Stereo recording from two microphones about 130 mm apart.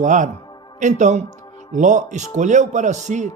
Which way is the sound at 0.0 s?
75° right (ahead or behind).